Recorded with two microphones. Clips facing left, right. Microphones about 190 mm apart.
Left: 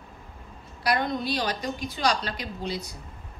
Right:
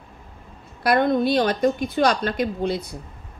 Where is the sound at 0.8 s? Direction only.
55° right (ahead or behind).